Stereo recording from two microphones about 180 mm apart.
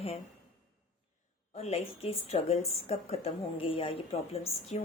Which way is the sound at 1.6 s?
35° left (ahead or behind).